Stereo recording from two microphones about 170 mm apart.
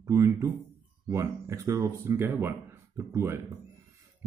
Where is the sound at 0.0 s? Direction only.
15° right (ahead or behind).